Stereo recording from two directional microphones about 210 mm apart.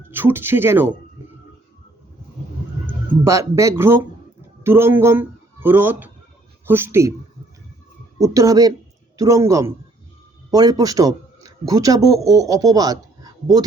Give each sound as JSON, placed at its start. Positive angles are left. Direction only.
{"t": 0.1, "sound": "speech", "side_deg": -10}
{"t": 3.2, "sound": "speech", "side_deg": -15}
{"t": 8.2, "sound": "a man's voice", "side_deg": -15}